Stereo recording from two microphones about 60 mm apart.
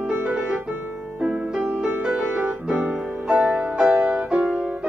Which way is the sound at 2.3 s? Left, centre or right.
Right.